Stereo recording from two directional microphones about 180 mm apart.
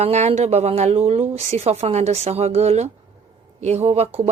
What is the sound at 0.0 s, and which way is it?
Speech, 40° right (ahead or behind).